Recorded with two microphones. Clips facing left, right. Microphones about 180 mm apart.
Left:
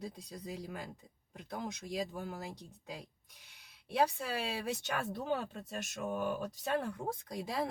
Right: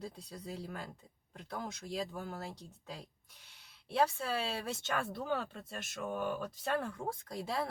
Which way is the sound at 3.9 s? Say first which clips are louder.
Even; 15° left (ahead or behind).